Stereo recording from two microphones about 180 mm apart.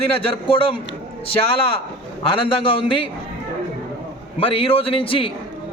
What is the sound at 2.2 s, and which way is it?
Speech, 30° left (ahead or behind).